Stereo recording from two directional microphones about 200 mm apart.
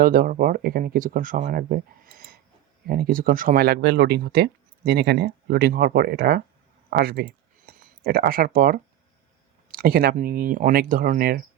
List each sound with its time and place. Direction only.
0.0 s speech: 45° right (ahead or behind)